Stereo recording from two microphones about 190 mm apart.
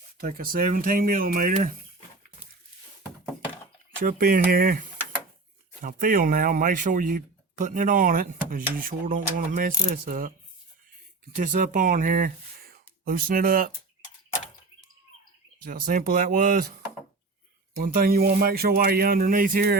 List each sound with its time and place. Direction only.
0.2 s speech: 50° right (ahead or behind)
4.0 s speech: 50° right (ahead or behind)
11.3 s speech: 45° right (ahead or behind)
15.6 s speech: 45° right (ahead or behind)
17.7 s speech: 50° right (ahead or behind)